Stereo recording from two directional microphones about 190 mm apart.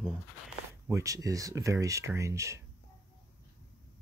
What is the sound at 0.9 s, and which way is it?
Speech, 15° right (ahead or behind).